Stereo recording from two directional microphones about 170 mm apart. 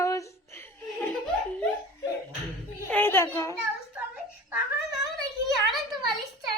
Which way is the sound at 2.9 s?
10° left (ahead or behind).